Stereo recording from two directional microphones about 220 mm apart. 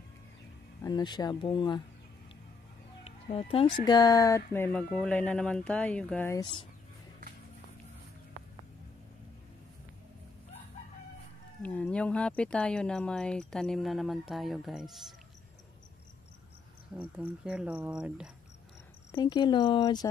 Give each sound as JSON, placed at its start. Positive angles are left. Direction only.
{"t": 0.8, "sound": "speech", "side_deg": 20}
{"t": 3.0, "sound": "speech", "side_deg": 25}
{"t": 11.6, "sound": "speech", "side_deg": 5}
{"t": 16.9, "sound": "speech", "side_deg": -5}
{"t": 19.1, "sound": "speech", "side_deg": 20}